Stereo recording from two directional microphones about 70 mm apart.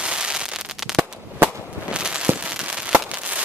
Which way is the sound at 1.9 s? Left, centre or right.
Centre.